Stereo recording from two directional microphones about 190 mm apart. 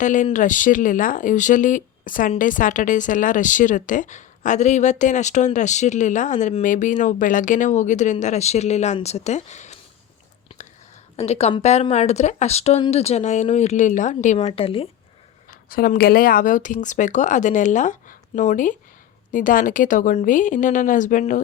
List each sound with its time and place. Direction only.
0.0 s speech: 40° left (ahead or behind)
10.5 s whispering: 30° left (ahead or behind)
11.2 s speech: 35° left (ahead or behind)
14.4 s speech: 30° left (ahead or behind)
15.7 s speech: 50° left (ahead or behind)